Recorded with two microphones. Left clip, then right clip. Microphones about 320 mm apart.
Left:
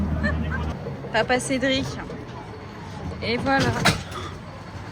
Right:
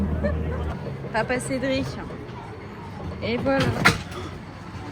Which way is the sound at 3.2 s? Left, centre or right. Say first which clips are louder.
Left 1 dB; centre.